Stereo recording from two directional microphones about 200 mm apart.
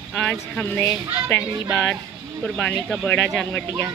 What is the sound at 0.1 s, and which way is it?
Speech, 5° left (ahead or behind).